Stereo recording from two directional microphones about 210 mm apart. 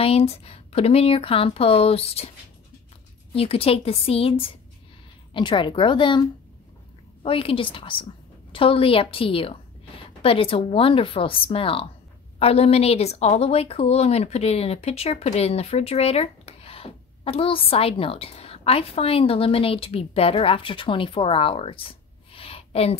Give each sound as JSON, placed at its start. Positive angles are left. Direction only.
{"t": 0.0, "sound": "speech", "side_deg": 30}
{"t": 3.3, "sound": "speech", "side_deg": 25}
{"t": 7.2, "sound": "speech", "side_deg": 25}
{"t": 22.3, "sound": "a sound", "side_deg": 25}